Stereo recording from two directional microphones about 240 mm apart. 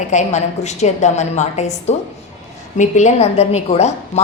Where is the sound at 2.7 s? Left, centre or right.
Left.